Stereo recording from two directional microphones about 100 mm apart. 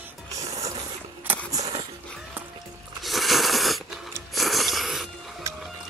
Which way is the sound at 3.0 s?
Centre (ahead or behind).